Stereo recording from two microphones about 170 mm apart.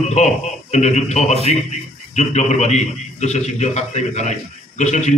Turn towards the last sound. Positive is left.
turn(degrees=45)  # may be behind; listen again after turning